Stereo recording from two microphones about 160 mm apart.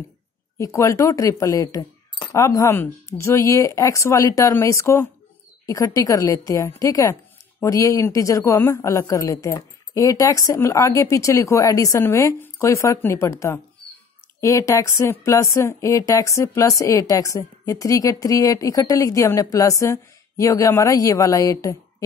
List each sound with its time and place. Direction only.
0.6 s speech: 20° left (ahead or behind)
14.4 s speech: 20° left (ahead or behind)